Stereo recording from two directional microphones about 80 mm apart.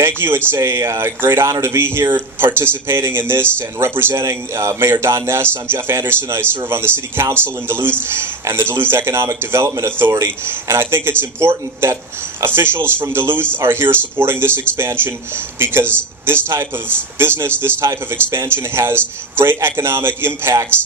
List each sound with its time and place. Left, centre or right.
0.0 s speech: right